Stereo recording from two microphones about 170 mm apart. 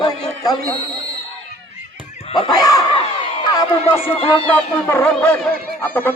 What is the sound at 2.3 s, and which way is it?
Speech, 25° left (ahead or behind).